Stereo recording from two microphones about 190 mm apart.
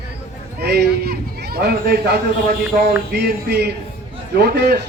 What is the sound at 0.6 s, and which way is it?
Speech, 60° right (ahead or behind).